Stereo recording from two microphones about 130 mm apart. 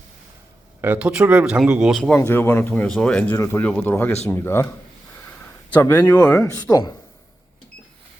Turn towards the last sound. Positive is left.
turn(degrees=30)  # may be behind; listen again after turning